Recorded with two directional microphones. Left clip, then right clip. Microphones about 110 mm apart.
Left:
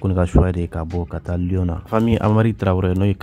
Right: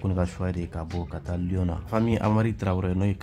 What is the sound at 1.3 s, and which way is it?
Speech, 30° left (ahead or behind).